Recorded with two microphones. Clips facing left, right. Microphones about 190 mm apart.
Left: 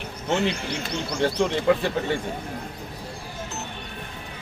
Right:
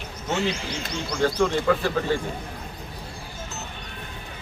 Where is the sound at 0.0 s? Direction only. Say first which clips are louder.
Left 2 dB; 60° left (ahead or behind).